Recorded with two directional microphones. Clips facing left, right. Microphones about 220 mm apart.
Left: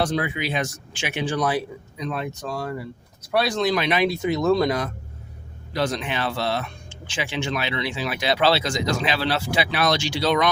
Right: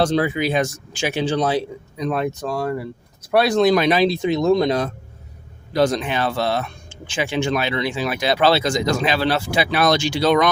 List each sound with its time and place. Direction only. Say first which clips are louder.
0.0 s speech: right 6 dB; 30° right (ahead or behind)
1.4 s speech: right 2 dB; 25° right (ahead or behind)
2.0 s speech: right 7 dB; 50° right (ahead or behind)
3.8 s speech: right 5 dB; 35° right (ahead or behind)
4.2 s speech: right 3 dB; 15° right (ahead or behind)
5.7 s speech: right 6 dB; 45° right (ahead or behind)